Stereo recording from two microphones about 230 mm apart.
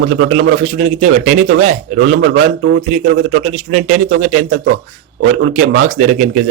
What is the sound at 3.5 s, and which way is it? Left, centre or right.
Speech, right.